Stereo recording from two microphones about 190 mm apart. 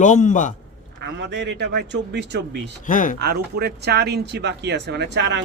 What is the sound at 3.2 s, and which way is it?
Speech, 55° right (ahead or behind).